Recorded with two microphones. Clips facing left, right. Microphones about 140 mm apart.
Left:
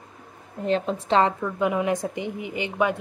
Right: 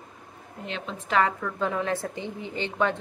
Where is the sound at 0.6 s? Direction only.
40° left (ahead or behind).